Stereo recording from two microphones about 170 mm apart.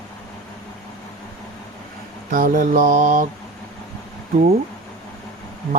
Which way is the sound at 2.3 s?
50° right (ahead or behind).